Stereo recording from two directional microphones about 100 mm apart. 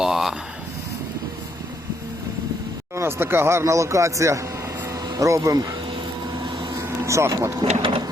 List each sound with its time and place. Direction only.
0.0 s a sound: 5° right (ahead or behind)
2.9 s speech: 25° right (ahead or behind)
4.9 s a sound: 35° right (ahead or behind)
6.4 s vehicle: 50° right (ahead or behind)
6.8 s vehicle: 30° right (ahead or behind)
7.6 s sewing machine: 55° right (ahead or behind)